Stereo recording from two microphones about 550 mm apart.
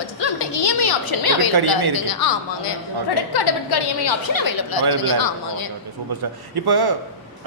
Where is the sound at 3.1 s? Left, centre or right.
Left.